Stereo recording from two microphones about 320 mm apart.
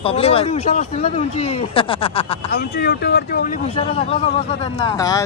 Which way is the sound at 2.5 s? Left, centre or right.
Left.